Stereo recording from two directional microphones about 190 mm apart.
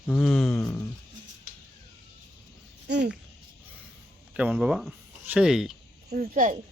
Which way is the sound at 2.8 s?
60° right (ahead or behind).